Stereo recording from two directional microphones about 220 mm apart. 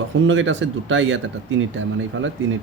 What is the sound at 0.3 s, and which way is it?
Speech, 60° right (ahead or behind).